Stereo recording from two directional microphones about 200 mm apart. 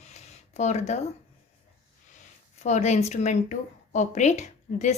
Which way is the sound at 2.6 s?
35° left (ahead or behind).